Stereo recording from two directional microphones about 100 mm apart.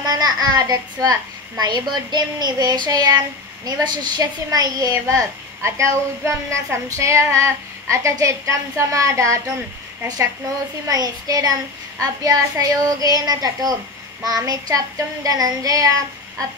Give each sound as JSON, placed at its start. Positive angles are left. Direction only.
{"t": 0.0, "sound": "a woman's voice", "side_deg": -40}